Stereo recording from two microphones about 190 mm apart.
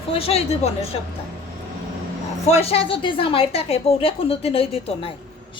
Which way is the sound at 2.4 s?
35° left (ahead or behind).